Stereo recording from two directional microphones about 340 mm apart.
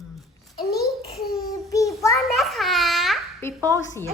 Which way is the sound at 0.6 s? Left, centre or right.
Left.